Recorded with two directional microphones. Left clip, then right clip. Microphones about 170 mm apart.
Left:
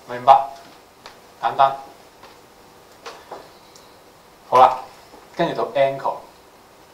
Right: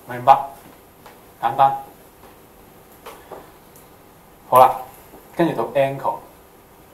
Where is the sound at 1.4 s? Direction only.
35° right (ahead or behind).